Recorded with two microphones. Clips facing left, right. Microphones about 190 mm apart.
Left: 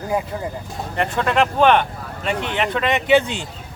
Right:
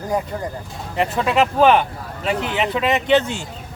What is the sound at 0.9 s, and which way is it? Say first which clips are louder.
Speech: right 1 dB; 5° right (ahead or behind).